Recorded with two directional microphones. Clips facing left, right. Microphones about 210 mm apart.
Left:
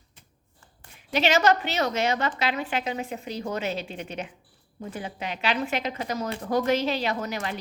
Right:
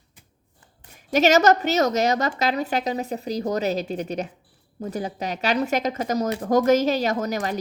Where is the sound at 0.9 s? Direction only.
45° right (ahead or behind).